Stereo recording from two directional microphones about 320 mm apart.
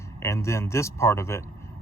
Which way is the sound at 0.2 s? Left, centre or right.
Centre.